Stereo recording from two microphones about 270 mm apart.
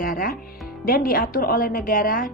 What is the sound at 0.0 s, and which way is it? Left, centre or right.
Music, left.